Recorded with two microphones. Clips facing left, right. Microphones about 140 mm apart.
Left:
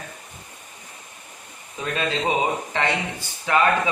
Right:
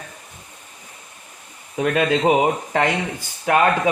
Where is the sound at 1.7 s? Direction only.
55° right (ahead or behind).